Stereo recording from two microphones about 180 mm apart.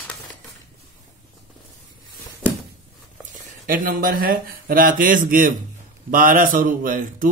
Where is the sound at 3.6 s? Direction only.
50° right (ahead or behind).